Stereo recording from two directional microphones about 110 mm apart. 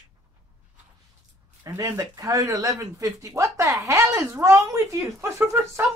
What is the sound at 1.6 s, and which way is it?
A man's voice, 25° right (ahead or behind).